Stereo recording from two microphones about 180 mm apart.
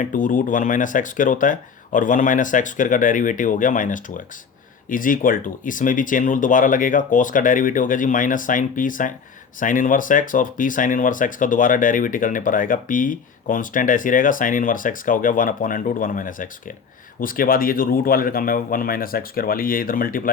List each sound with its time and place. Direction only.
0.0 s speech: 45° left (ahead or behind)